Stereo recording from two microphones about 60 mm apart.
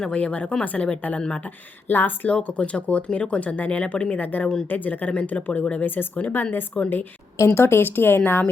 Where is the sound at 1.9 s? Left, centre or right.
Left.